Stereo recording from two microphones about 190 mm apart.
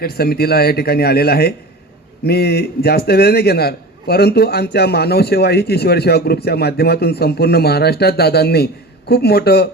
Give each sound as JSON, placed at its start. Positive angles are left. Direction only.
{"t": 0.0, "sound": "a man's voice", "side_deg": 55}